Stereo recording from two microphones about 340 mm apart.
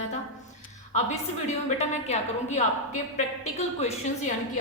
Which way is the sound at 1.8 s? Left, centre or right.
Centre.